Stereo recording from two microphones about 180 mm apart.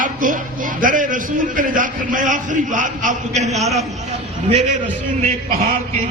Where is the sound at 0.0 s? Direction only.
50° right (ahead or behind).